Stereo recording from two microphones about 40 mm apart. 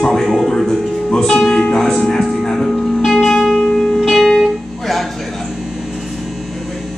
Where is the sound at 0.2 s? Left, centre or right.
Centre.